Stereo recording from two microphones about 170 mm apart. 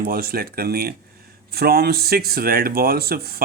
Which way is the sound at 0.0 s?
60° right (ahead or behind).